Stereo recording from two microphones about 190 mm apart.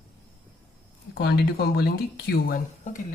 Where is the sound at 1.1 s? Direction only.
60° left (ahead or behind).